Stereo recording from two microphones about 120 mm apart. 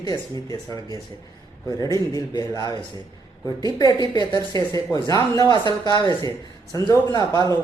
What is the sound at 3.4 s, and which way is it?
Speech, 35° right (ahead or behind).